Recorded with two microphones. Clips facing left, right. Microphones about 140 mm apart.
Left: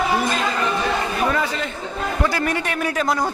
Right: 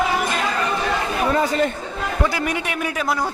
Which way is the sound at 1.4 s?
45° right (ahead or behind).